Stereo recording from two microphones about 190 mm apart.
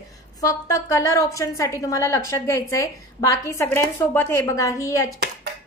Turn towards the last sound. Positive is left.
turn(degrees=15)  # may be behind; listen again after turning